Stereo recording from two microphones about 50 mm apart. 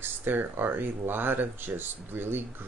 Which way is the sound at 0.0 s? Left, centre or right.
Right.